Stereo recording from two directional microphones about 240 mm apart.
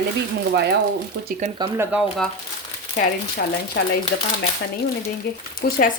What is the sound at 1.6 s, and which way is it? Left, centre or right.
Speech, centre.